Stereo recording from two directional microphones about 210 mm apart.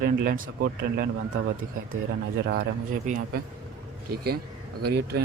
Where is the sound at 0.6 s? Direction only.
60° right (ahead or behind).